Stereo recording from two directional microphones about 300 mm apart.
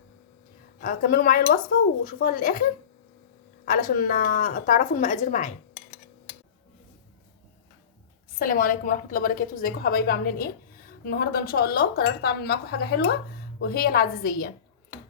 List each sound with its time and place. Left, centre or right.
0.8 s a woman's voice: left
3.7 s a woman's voice: left
8.4 s a woman's voice: left